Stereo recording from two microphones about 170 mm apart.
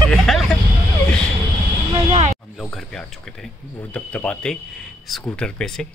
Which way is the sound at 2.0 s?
40° right (ahead or behind).